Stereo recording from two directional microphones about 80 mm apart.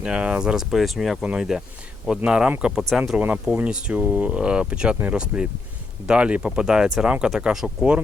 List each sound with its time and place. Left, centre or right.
0.0 s speech: centre